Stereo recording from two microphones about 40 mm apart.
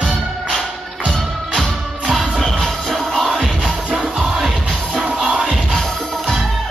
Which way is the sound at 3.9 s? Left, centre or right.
Right.